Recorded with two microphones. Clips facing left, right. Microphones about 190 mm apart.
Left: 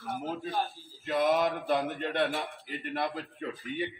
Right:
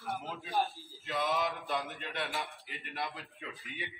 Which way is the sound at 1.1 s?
50° left (ahead or behind).